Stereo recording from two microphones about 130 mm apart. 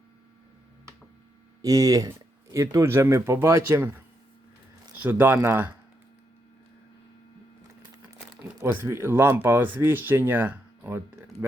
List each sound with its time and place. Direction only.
1.6 s speech: 25° right (ahead or behind)
5.0 s speech: 15° right (ahead or behind)
8.5 s speech: 20° right (ahead or behind)